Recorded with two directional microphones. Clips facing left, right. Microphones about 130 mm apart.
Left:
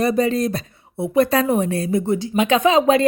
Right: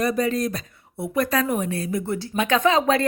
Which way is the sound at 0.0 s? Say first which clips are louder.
Left 4 dB; 30° left (ahead or behind).